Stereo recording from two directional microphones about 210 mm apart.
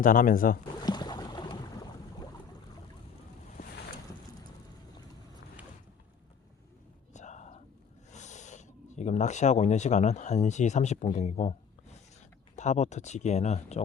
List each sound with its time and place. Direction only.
0.0 s speech: 40° left (ahead or behind)
0.8 s boat: 20° left (ahead or behind)
7.1 s whispering: 35° left (ahead or behind)
8.1 s speech: 35° left (ahead or behind)